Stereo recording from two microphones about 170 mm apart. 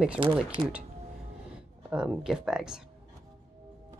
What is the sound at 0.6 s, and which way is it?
Speech, 25° right (ahead or behind).